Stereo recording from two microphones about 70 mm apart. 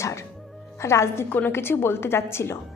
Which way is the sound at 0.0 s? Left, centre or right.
Left.